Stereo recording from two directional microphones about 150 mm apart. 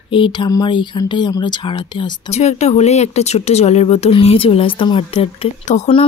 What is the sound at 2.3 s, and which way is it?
Speech, 45° left (ahead or behind).